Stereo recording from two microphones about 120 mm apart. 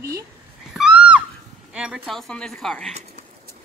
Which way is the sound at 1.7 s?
5° right (ahead or behind).